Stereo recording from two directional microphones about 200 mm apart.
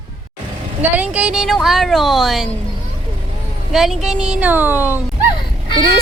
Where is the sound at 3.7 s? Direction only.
Centre (ahead or behind).